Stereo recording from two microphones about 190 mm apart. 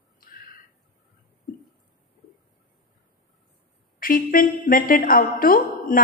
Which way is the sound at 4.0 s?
50° left (ahead or behind).